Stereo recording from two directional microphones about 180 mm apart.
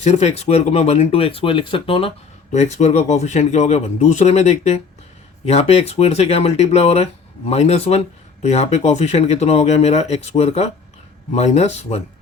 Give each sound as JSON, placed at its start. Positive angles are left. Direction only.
{"t": 0.0, "sound": "speech", "side_deg": 35}